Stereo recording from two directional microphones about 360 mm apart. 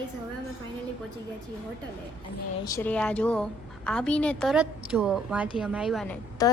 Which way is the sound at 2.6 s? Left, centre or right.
Centre.